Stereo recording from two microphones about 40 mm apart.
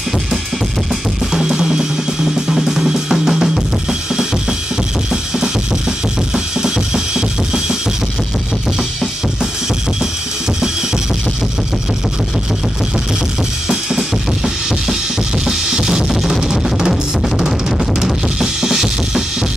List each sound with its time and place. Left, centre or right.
1.3 s music: centre
4.1 s drum: centre
13.7 s drum kit: centre
15.4 s music: centre
16.9 s drum kit: centre